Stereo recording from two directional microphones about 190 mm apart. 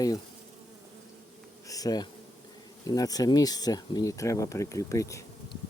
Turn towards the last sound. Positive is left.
turn(degrees=15)  # may be behind; listen again after turning